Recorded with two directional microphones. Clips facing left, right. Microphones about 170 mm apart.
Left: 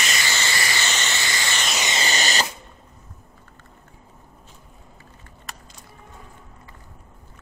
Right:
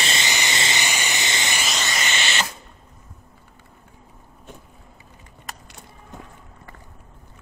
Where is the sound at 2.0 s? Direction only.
40° left (ahead or behind).